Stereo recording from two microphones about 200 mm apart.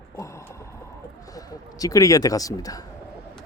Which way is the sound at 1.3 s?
20° left (ahead or behind).